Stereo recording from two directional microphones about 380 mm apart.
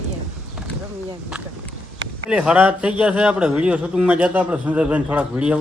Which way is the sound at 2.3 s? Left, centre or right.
Centre.